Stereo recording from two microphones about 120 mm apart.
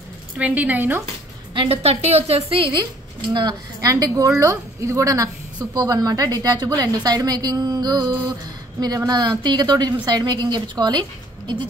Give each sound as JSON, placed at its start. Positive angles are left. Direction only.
{"t": 0.4, "sound": "a woman's voice", "side_deg": -15}
{"t": 1.5, "sound": "a woman's voice", "side_deg": -50}
{"t": 3.3, "sound": "a woman's voice", "side_deg": -35}